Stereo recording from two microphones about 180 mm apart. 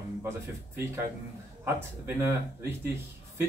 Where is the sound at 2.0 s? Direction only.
10° right (ahead or behind).